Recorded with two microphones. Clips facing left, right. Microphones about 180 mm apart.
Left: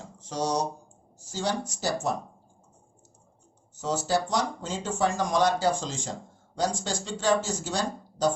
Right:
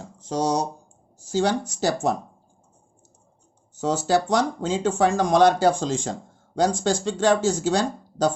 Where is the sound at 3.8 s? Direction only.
90° right; by 7.8 s 70° right (ahead or behind).